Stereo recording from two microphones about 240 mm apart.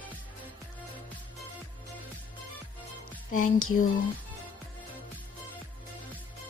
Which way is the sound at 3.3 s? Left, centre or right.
Left.